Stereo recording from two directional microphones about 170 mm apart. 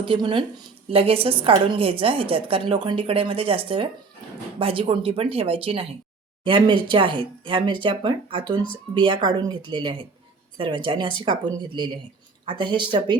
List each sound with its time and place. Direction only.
0.0 s a woman's voice: 30° right (ahead or behind)